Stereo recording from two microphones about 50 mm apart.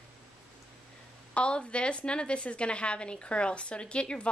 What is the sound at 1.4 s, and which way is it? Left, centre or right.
Speech, left.